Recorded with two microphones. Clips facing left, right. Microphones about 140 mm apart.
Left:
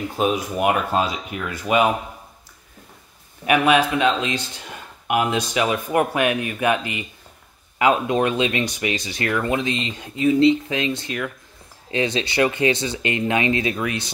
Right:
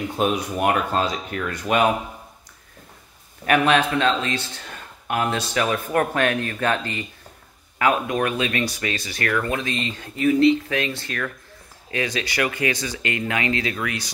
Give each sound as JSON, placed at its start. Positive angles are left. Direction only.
{"t": 0.2, "sound": "speech", "side_deg": 5}
{"t": 3.4, "sound": "speech", "side_deg": 10}